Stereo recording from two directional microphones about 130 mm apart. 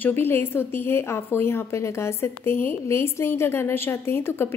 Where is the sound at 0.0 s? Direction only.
15° left (ahead or behind).